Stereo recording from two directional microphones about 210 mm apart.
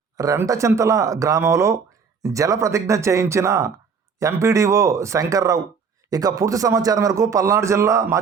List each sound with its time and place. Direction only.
0.2 s speech: 15° right (ahead or behind)